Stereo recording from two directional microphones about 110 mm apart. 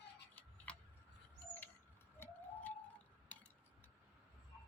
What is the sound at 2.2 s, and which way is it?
Bird, 20° left (ahead or behind).